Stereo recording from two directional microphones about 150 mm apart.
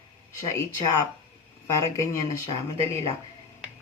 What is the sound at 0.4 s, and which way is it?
Speech, 20° left (ahead or behind).